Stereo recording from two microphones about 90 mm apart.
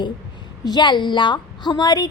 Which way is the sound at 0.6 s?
55° left (ahead or behind).